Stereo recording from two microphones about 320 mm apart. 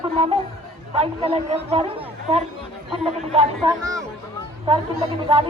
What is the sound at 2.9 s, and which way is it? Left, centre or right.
Speech, centre.